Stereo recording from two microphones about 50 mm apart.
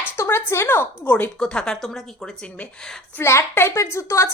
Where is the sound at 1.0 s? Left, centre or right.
Left.